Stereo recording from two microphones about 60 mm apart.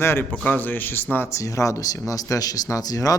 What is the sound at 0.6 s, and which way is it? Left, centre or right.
Speech, left.